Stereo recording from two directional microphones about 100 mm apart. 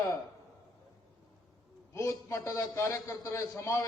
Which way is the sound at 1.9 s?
30° left (ahead or behind).